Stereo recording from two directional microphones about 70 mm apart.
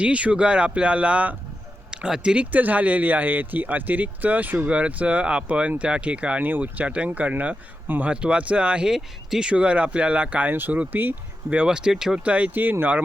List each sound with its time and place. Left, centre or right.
0.0 s speech: centre
11.7 s speech: centre